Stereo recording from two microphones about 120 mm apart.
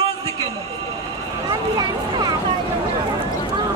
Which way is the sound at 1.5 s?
35° right (ahead or behind).